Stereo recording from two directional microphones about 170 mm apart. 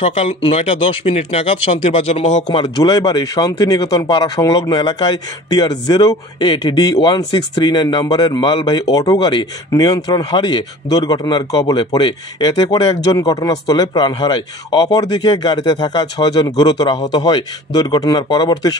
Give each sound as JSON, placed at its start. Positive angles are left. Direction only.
{"t": 0.0, "sound": "speech", "side_deg": 35}
{"t": 2.6, "sound": "speech", "side_deg": 25}